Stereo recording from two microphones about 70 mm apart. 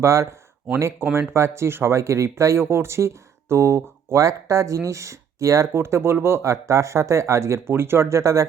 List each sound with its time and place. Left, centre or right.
0.0 s speech: right